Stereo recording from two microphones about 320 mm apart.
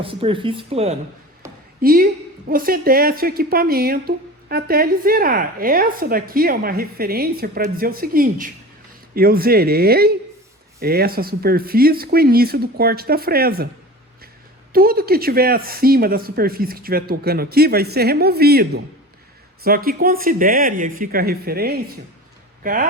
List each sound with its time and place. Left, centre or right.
0.0 s a woman's voice: centre
14.7 s a woman's voice: right